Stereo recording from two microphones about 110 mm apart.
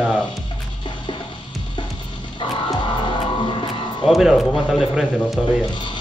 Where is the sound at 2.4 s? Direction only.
50° left (ahead or behind).